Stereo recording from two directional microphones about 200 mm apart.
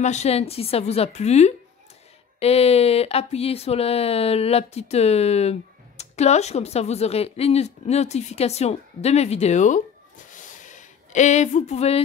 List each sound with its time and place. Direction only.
0.0 s speech: 35° left (ahead or behind)